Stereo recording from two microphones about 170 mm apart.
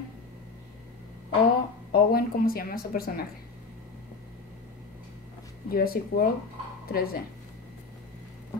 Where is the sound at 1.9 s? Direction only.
60° left (ahead or behind).